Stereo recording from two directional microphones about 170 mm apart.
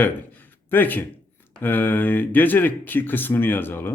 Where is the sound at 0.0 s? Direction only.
10° left (ahead or behind).